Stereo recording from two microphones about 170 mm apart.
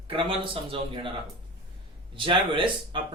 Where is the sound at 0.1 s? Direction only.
30° right (ahead or behind).